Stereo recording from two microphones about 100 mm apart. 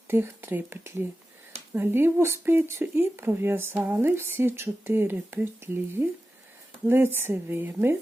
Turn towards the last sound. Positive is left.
turn(degrees=-25)  # may be behind; listen again after turning